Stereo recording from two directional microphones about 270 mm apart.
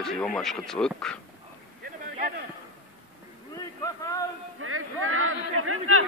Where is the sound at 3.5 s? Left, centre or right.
Centre.